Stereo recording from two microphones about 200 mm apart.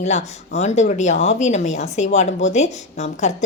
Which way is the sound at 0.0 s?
35° left (ahead or behind).